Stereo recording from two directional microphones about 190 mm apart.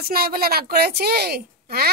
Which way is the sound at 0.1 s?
55° right (ahead or behind).